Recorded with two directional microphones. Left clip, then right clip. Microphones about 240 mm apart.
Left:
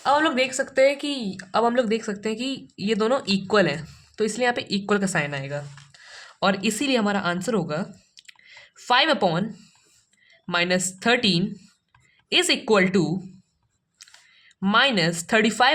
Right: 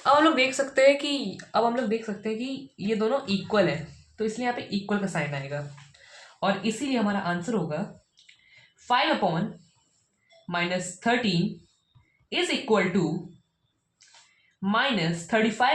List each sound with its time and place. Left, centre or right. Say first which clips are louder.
0.0 s speech: even; left
10.4 s speech: left 5 dB; left
12.3 s speech: left 5 dB; left
14.6 s speech: left 6 dB; left